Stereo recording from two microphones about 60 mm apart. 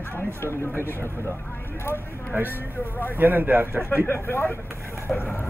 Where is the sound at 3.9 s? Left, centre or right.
Left.